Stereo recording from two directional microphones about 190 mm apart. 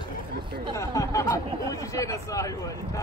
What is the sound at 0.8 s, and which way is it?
Speech, 15° left (ahead or behind).